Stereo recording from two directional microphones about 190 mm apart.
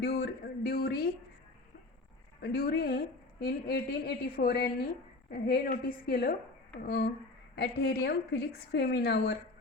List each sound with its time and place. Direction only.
0.0 s speech: 55° left (ahead or behind)
2.4 s speech: 55° left (ahead or behind)